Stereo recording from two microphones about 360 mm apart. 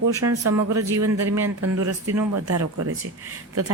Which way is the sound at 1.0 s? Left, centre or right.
Right.